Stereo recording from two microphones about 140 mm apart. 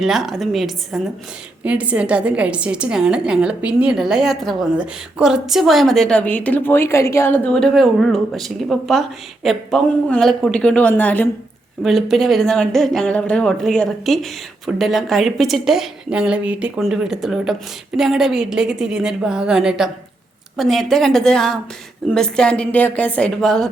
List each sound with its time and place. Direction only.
0.0 s a woman's voice: centre (ahead or behind); by 7.5 s 15° left (ahead or behind)
7.5 s a woman's voice: centre (ahead or behind)
11.8 s a woman's voice: centre (ahead or behind)